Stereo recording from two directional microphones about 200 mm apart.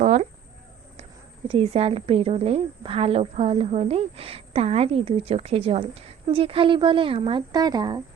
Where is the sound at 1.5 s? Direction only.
30° right (ahead or behind).